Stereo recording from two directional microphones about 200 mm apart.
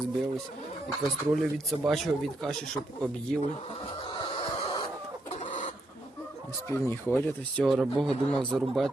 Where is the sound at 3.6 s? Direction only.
30° left (ahead or behind).